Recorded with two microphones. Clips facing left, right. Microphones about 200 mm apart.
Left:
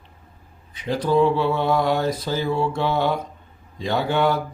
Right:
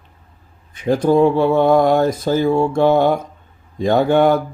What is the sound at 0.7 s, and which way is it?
Speech, 50° right (ahead or behind).